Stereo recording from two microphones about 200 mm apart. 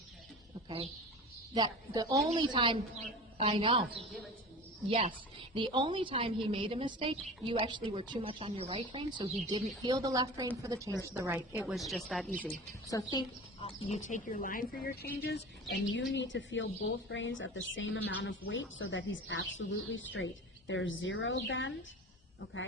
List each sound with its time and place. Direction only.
1.5 s speech: 20° right (ahead or behind)
5.4 s a woman's voice: 25° right (ahead or behind); by 13.0 s 10° left (ahead or behind)
13.0 s speech: 20° left (ahead or behind); by 21.7 s 70° left (ahead or behind)